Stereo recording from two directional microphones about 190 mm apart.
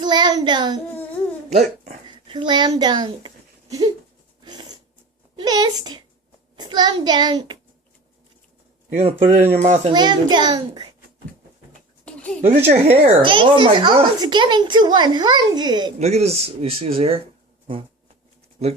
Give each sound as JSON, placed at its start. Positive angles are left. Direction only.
{"t": 0.0, "sound": "child singing", "side_deg": -25}
{"t": 0.9, "sound": "a sound", "side_deg": 10}
{"t": 2.0, "sound": "a child's voice", "side_deg": -25}
{"t": 4.4, "sound": "dog", "side_deg": -20}
{"t": 5.4, "sound": "a child's voice", "side_deg": -20}
{"t": 9.0, "sound": "speech", "side_deg": -35}
{"t": 9.9, "sound": "a child's voice", "side_deg": -25}
{"t": 12.0, "sound": "a sound", "side_deg": 5}
{"t": 12.4, "sound": "a child's voice", "side_deg": -35}
{"t": 16.0, "sound": "speech", "side_deg": -35}